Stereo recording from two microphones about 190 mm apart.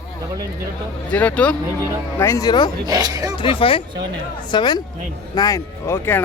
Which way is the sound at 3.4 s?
30° left (ahead or behind).